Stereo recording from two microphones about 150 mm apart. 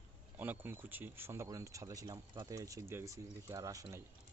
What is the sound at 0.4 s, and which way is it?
Speech, 15° right (ahead or behind).